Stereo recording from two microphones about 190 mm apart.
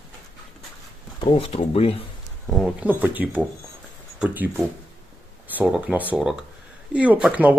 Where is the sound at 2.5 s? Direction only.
Centre (ahead or behind).